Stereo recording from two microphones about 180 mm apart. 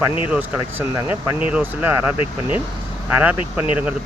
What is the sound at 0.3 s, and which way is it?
Speech, 10° right (ahead or behind).